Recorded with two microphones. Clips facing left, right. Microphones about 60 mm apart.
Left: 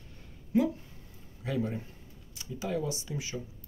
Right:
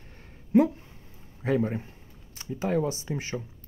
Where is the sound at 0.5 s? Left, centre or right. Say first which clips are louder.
Right 6 dB; right.